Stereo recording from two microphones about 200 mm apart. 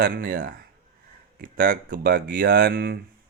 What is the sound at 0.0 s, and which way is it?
Speech, 50° right (ahead or behind).